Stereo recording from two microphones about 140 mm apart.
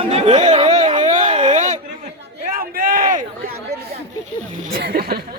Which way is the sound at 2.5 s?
90° right.